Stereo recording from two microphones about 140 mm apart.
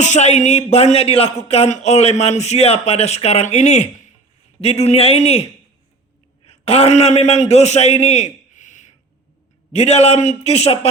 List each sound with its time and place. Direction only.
0.0 s a man's voice: 55° left (ahead or behind)